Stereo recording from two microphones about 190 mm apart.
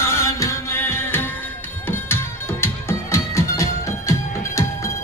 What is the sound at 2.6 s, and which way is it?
Music, 15° left (ahead or behind).